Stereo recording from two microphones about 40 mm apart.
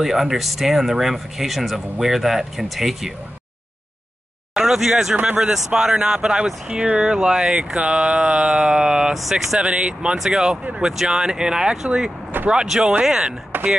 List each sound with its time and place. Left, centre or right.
0.0 s speech: centre
4.6 s speech: centre
9.1 s speech: centre
9.6 s speech: right
10.1 s speech: centre
13.5 s a sound: right